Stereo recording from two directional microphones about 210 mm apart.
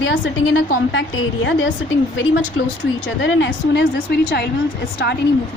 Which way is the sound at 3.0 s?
60° left (ahead or behind).